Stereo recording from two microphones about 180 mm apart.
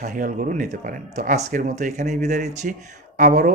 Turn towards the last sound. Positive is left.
turn(degrees=-45)  # may be behind; listen again after turning